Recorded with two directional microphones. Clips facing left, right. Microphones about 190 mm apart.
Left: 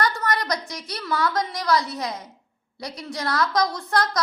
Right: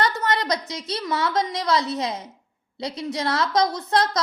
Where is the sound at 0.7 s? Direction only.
25° right (ahead or behind).